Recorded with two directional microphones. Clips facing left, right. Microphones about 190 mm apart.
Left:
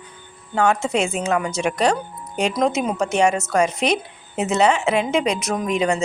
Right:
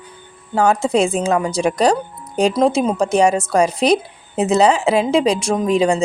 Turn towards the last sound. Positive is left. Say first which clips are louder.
# right 5 dB
turn(degrees=-30)  # may be behind; listen again after turning